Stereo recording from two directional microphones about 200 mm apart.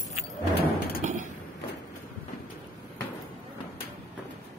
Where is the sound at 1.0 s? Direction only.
40° right (ahead or behind).